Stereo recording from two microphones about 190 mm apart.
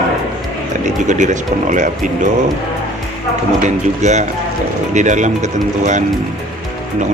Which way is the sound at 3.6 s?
40° right (ahead or behind).